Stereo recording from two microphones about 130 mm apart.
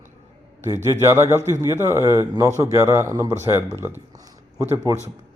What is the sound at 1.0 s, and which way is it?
A man's voice, 20° right (ahead or behind).